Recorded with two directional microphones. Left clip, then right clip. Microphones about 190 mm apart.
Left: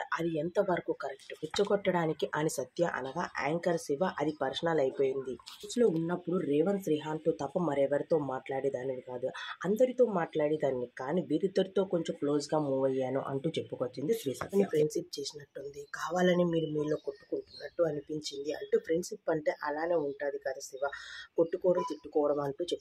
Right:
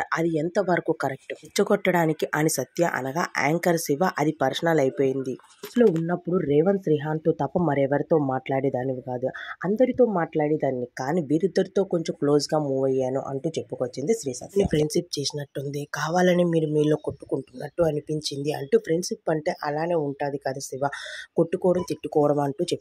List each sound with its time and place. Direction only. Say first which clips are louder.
0.0 s speech: right 8 dB; 40° right (ahead or behind)